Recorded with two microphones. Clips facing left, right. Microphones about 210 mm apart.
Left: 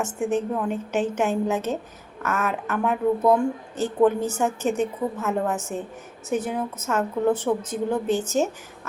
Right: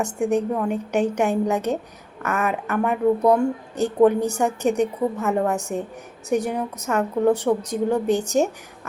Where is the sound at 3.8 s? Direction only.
15° right (ahead or behind).